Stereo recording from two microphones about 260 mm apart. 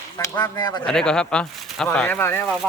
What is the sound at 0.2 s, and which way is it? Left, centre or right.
Speech, centre.